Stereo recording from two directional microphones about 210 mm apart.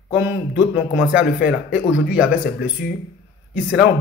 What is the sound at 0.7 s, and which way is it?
A man's voice, 60° left (ahead or behind).